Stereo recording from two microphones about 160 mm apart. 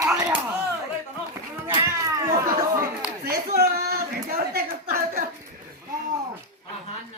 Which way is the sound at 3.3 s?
75° right (ahead or behind).